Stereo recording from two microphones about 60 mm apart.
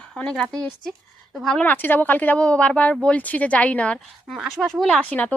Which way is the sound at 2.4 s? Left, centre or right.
Centre.